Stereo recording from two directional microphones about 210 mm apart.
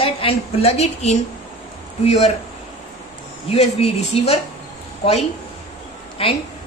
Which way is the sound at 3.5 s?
30° left (ahead or behind).